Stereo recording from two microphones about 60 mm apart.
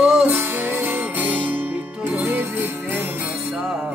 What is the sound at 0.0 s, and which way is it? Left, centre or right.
Music, centre.